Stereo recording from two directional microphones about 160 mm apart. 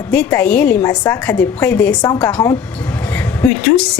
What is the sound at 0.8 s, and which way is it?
Speech, 20° left (ahead or behind).